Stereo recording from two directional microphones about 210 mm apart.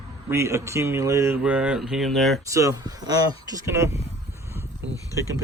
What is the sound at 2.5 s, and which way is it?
Speech, 15° right (ahead or behind).